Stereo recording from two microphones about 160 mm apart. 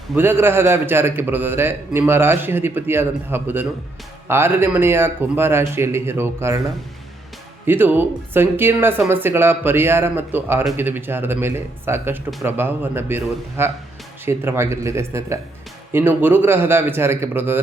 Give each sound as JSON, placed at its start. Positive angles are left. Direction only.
{"t": 0.2, "sound": "a man's voice", "side_deg": -15}
{"t": 7.7, "sound": "a man's voice", "side_deg": -10}